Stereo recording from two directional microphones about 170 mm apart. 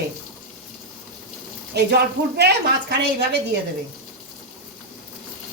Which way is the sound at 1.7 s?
75° right (ahead or behind).